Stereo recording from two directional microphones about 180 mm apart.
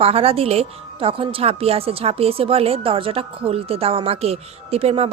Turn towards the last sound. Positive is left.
turn(degrees=-35)  # may be behind; listen again after turning